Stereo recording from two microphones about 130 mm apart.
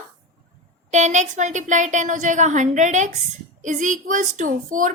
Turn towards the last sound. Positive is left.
turn(degrees=-85)